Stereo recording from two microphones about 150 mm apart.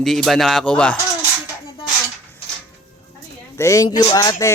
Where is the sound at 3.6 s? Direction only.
20° left (ahead or behind).